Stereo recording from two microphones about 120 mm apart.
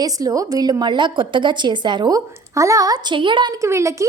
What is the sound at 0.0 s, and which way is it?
A woman's voice, 30° right (ahead or behind).